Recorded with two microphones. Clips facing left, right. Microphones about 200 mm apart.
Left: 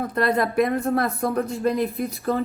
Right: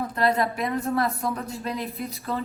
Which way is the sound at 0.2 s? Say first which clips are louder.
Left 4 dB; 50° left (ahead or behind).